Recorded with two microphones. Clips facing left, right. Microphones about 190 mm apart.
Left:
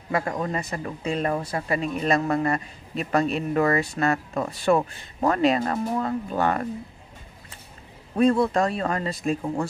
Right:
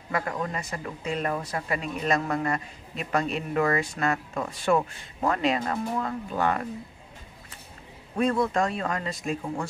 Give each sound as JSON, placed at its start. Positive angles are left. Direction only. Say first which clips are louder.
{"t": 0.1, "sound": "speech", "louder": "left 4 dB", "side_deg": 30}
{"t": 8.2, "sound": "speech", "louder": "left 4 dB", "side_deg": 30}